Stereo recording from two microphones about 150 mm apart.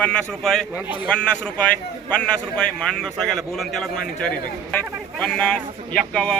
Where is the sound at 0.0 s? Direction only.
5° left (ahead or behind).